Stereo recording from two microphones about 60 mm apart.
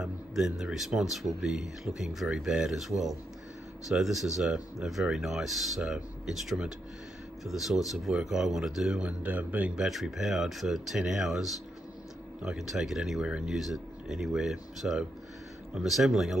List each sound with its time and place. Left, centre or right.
0.0 s speech: centre
2.5 s speech: centre
5.8 s speech: centre
7.4 s speech: centre; by 9.7 s right
9.8 s speech: centre
13.2 s speech: centre
13.6 s speech: centre